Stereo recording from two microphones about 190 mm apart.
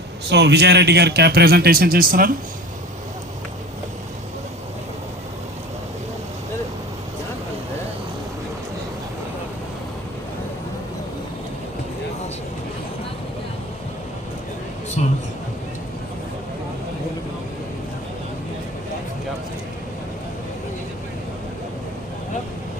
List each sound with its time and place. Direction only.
0.3 s speech: 60° right (ahead or behind)